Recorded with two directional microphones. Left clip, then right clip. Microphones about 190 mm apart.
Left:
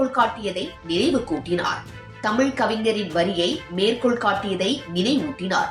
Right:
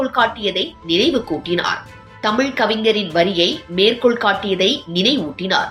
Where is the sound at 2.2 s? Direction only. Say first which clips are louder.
Right 4 dB; 25° right (ahead or behind).